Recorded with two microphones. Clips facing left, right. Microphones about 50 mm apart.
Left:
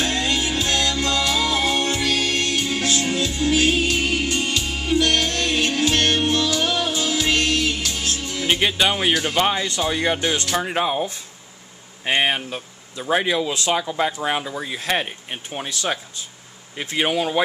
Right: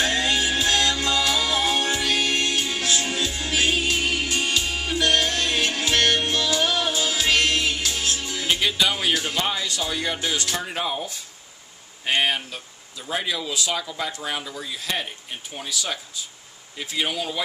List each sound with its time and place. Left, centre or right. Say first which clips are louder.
0.0 s music: even; centre
4.8 s music: left 6 dB; centre
5.1 s music: left 1 dB; centre
8.2 s music: left 2 dB; centre
8.5 s speech: left 3 dB; left
10.5 s speech: left 6 dB; left
12.0 s a sound: left 2 dB; left
12.4 s speech: left 6 dB; left